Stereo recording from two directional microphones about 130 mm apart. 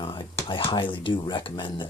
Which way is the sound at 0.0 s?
40° left (ahead or behind).